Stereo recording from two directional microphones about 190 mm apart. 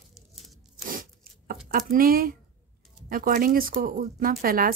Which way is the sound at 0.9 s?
45° right (ahead or behind).